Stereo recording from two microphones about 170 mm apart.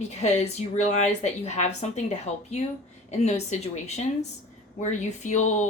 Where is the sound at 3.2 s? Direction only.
40° left (ahead or behind).